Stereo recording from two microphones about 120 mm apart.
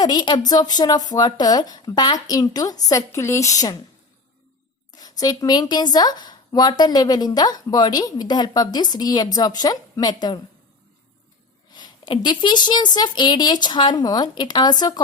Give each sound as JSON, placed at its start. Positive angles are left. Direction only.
{"t": 0.0, "sound": "a woman's voice", "side_deg": 35}
{"t": 4.9, "sound": "a woman's voice", "side_deg": 30}
{"t": 11.7, "sound": "a woman's voice", "side_deg": 40}